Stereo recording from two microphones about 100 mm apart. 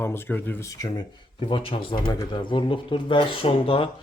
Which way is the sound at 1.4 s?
65° left (ahead or behind).